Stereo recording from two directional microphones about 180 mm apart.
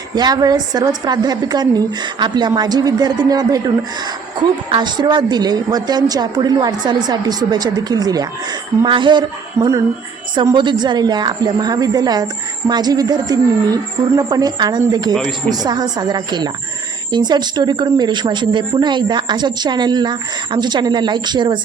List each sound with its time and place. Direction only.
0.1 s a woman's voice: 25° right (ahead or behind)